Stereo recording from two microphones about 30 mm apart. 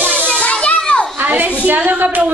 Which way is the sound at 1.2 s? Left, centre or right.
Right.